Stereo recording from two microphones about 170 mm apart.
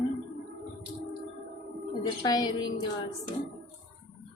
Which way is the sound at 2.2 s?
25° left (ahead or behind).